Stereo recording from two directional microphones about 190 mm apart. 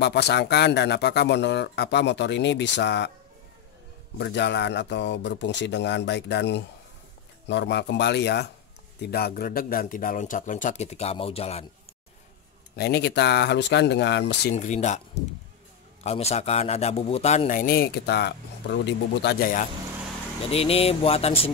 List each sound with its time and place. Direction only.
0.0 s speech: 60° left (ahead or behind)
4.2 s speech: 65° left (ahead or behind); by 11.6 s 30° left (ahead or behind)
12.7 s speech: 60° left (ahead or behind)
14.5 s a man's voice: 40° left (ahead or behind); by 19.5 s 65° left (ahead or behind)
20.4 s a man's voice: 30° left (ahead or behind)